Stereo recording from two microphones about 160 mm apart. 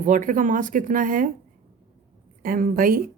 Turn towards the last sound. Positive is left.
turn(degrees=-60)  # may be behind; listen again after turning